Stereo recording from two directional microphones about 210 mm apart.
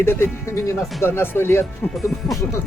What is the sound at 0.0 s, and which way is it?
Speech, 10° left (ahead or behind).